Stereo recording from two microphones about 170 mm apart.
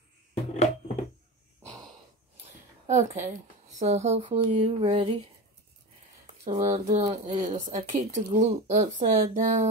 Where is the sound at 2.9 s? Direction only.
45° right (ahead or behind).